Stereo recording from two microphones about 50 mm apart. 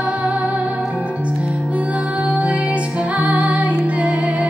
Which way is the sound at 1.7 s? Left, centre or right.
Right.